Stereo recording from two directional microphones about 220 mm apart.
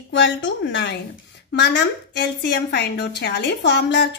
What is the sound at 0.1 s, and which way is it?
A woman's voice, 55° left (ahead or behind).